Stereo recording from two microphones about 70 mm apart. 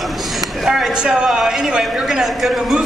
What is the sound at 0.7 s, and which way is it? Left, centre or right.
Speech, centre.